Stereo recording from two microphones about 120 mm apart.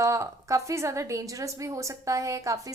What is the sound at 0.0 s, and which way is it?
A woman's voice, 25° right (ahead or behind).